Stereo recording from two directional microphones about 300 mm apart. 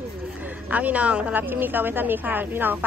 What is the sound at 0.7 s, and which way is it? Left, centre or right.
Speech, centre.